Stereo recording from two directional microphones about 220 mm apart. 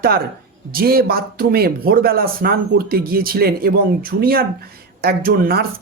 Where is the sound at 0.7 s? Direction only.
45° right (ahead or behind).